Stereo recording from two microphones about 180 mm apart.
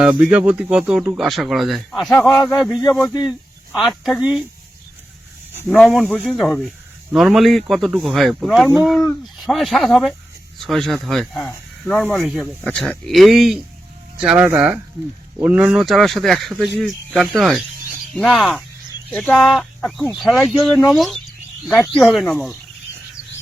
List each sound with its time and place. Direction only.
0.3 s speech: 5° right (ahead or behind)
5.6 s speech: 5° left (ahead or behind)